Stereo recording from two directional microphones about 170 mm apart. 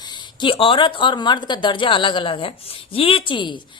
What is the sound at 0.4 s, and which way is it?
Speech, 30° left (ahead or behind).